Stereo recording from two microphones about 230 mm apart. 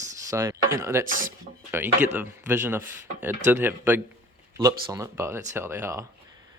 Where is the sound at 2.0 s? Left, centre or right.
Centre.